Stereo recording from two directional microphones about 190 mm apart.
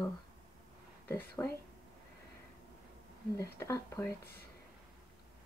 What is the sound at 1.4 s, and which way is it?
Speech, 15° left (ahead or behind).